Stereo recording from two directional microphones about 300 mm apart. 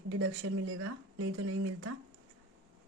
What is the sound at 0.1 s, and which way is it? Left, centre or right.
Speech, right.